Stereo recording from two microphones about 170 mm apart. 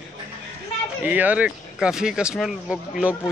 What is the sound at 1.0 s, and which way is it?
Speech, 10° right (ahead or behind).